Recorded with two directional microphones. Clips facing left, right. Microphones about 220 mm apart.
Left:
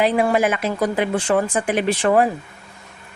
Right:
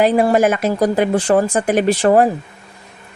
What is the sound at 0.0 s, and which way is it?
A woman's voice, 40° right (ahead or behind).